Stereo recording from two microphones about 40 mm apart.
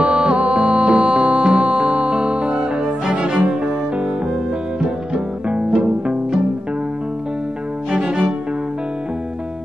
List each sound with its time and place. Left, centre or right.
0.0 s music: right
4.7 s music: right
7.9 s cello: right